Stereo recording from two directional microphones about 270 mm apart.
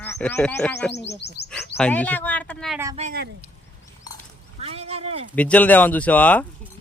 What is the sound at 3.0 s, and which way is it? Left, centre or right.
Speech, right.